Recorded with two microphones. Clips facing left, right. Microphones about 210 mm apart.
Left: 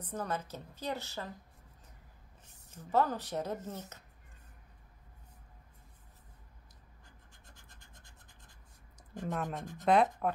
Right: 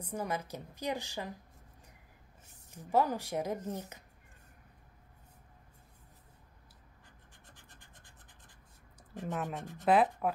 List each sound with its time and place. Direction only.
0.0 s a woman's voice: 10° right (ahead or behind)
2.7 s a woman's voice: 15° right (ahead or behind)
7.5 s scratch: 20° right (ahead or behind)
9.1 s speech: centre (ahead or behind)